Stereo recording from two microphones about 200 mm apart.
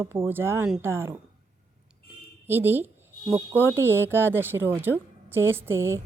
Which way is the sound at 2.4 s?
10° right (ahead or behind).